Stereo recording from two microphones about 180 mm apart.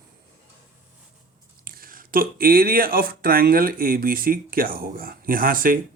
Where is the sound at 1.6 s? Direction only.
55° right (ahead or behind).